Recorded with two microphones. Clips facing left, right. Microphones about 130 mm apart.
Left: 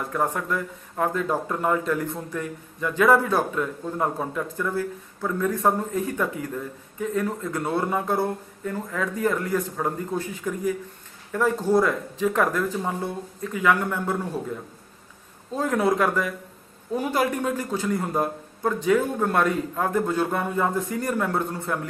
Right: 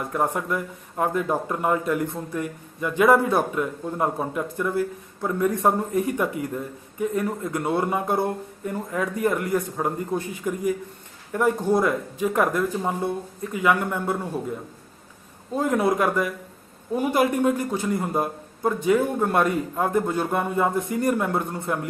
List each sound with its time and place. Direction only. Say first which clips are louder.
0.1 s a man's voice: right 1 dB; 10° right (ahead or behind)
15.5 s a man's voice: right 1 dB; 15° right (ahead or behind)